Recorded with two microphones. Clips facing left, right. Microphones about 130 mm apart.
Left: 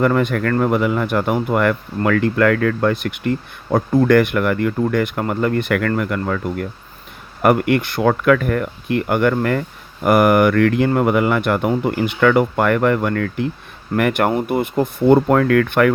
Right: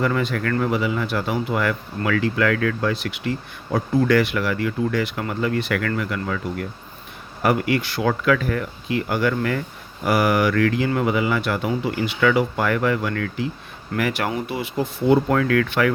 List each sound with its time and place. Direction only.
0.0 s speech: 55° left (ahead or behind)